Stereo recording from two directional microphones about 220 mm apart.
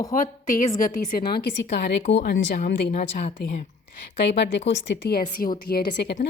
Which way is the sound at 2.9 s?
35° left (ahead or behind).